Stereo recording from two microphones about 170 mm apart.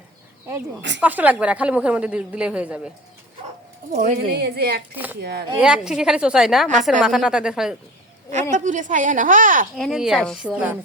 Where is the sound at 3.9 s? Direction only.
45° right (ahead or behind).